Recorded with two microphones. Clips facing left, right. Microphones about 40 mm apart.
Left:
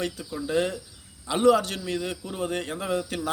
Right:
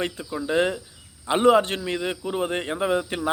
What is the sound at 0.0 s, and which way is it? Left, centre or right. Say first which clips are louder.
A man's voice: right 3 dB; right.